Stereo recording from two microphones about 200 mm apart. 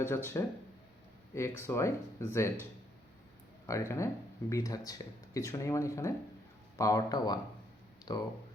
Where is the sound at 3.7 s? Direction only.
15° left (ahead or behind).